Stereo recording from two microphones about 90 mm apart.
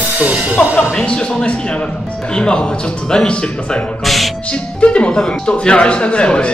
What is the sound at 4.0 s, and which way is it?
Music, centre (ahead or behind).